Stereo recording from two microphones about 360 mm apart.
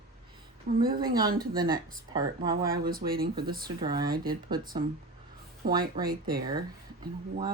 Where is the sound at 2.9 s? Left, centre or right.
Right.